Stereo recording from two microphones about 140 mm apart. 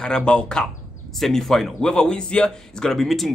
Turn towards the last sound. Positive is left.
turn(degrees=0)  # may be behind; listen again after turning